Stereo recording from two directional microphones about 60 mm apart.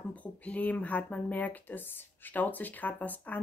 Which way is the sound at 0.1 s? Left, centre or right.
Left.